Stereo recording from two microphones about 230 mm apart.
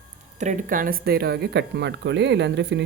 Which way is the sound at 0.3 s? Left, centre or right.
Right.